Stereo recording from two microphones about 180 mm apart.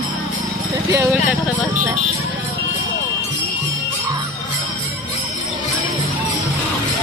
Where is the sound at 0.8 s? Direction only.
15° right (ahead or behind).